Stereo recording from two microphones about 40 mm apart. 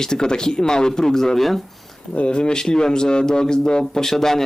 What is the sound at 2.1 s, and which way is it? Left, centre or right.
A man's voice, left.